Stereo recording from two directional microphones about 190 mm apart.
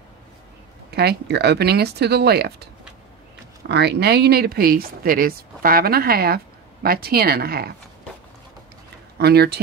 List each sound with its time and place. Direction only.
0.9 s speech: 60° right (ahead or behind)
9.2 s speech: 60° right (ahead or behind)